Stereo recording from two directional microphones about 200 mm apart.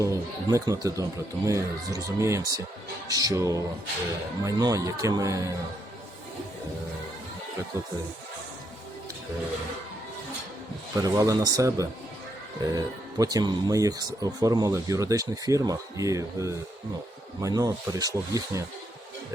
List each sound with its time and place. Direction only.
0.0 s speech: 15° right (ahead or behind)
10.9 s speech: 20° right (ahead or behind)